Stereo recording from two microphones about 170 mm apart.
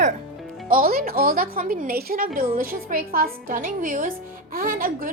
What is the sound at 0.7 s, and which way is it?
A woman's voice, 55° right (ahead or behind).